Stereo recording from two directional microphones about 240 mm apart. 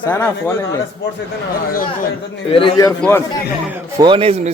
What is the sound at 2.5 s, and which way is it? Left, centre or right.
Speech, left.